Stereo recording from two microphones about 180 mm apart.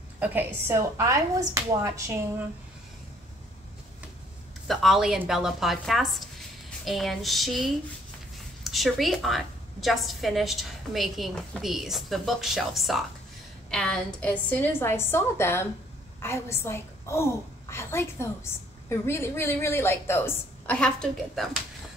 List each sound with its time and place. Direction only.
0.2 s a woman's voice: 10° right (ahead or behind)
4.6 s a woman's voice: centre (ahead or behind)